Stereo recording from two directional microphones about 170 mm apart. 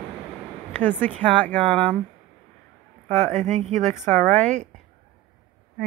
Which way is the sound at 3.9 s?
10° left (ahead or behind).